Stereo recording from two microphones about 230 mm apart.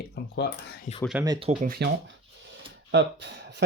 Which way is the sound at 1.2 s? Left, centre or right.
Centre.